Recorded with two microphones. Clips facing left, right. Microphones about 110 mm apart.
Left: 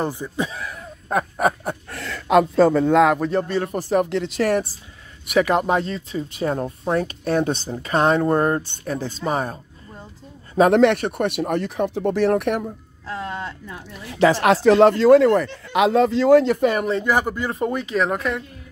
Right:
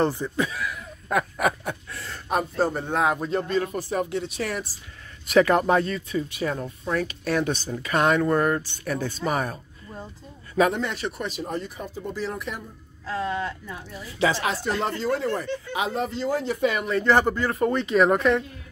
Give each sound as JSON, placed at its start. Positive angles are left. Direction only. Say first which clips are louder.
{"t": 0.0, "sound": "speech", "louder": "right 1 dB", "side_deg": 15}
{"t": 0.5, "sound": "speech", "louder": "right 1 dB", "side_deg": 35}
{"t": 1.0, "sound": "a sound", "louder": "left 3 dB", "side_deg": 30}
{"t": 1.6, "sound": "a sound", "louder": "left 4 dB", "side_deg": 45}
{"t": 2.0, "sound": "speech", "louder": "left 11 dB", "side_deg": 90}
{"t": 5.3, "sound": "speech", "louder": "even", "side_deg": 15}
{"t": 6.3, "sound": "speech", "louder": "left 5 dB", "side_deg": 40}
{"t": 10.7, "sound": "speech", "louder": "left 14 dB", "side_deg": 85}
{"t": 11.0, "sound": "speech", "louder": "left 8 dB", "side_deg": 55}
{"t": 13.1, "sound": "a sound", "louder": "right 2 dB", "side_deg": 25}
{"t": 14.0, "sound": "speech", "louder": "left 8 dB", "side_deg": 80}
{"t": 16.6, "sound": "speech", "louder": "left 5 dB", "side_deg": 40}
{"t": 17.0, "sound": "speech", "louder": "right 1 dB", "side_deg": 10}